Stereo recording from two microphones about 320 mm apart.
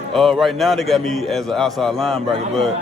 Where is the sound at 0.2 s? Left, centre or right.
Centre.